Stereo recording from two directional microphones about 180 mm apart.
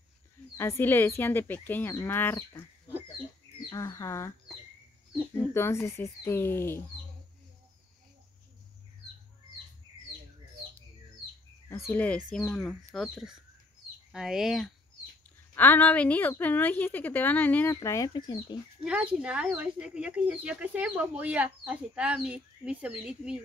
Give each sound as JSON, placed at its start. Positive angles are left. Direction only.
{"t": 0.6, "sound": "a woman's voice", "side_deg": 15}
{"t": 3.7, "sound": "a woman's voice", "side_deg": 15}
{"t": 11.7, "sound": "a woman's voice", "side_deg": 10}
{"t": 15.5, "sound": "a woman's voice", "side_deg": 10}
{"t": 18.9, "sound": "speech", "side_deg": -5}